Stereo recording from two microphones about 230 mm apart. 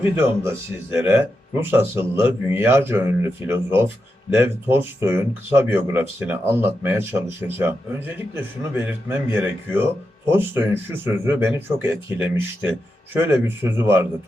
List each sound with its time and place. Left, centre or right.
0.0 s a man's voice: centre